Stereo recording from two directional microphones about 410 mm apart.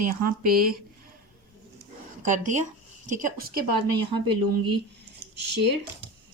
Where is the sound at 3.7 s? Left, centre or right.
Right.